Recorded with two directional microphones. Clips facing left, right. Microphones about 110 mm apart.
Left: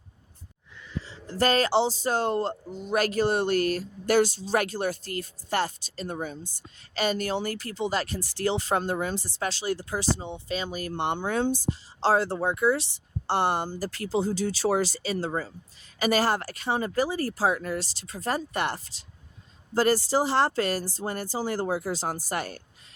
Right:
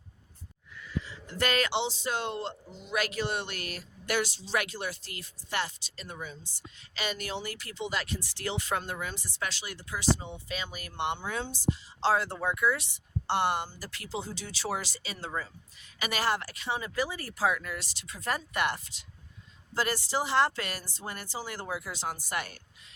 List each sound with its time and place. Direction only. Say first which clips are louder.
0.8 s speech: even; 25° left (ahead or behind); by 11.7 s 50° left (ahead or behind)
11.7 s speech: even; 35° left (ahead or behind)